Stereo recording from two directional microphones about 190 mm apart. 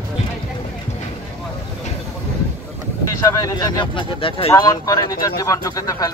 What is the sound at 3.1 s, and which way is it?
Speech, 15° left (ahead or behind).